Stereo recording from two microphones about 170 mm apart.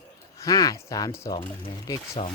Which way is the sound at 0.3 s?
20° left (ahead or behind).